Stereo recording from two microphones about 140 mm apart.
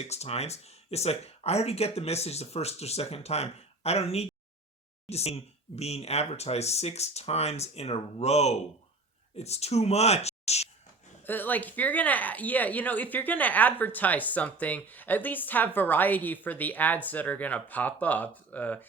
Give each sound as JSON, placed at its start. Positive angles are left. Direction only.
{"t": 0.0, "sound": "speech", "side_deg": 50}
{"t": 11.3, "sound": "speech", "side_deg": 15}